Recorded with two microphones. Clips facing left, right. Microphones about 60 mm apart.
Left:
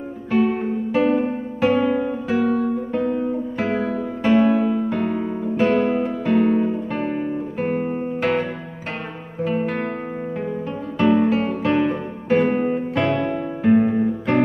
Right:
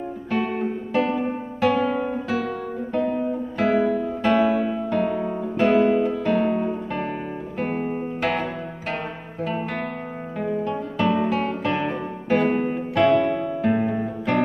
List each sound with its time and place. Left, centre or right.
0.9 s music: centre
1.6 s music: left
2.2 s music: centre
5.9 s music: left
6.2 s music: centre
6.5 s guitar: centre
9.4 s guitar: centre
11.0 s music: centre